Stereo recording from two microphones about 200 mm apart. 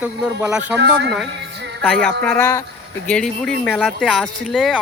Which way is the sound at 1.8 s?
5° left (ahead or behind).